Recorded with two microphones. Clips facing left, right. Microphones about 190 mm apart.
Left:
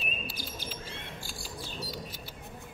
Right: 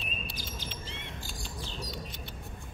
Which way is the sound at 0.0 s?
5° left (ahead or behind).